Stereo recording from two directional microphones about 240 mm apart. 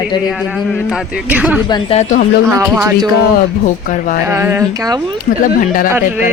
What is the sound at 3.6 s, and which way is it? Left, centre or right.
Speech, left.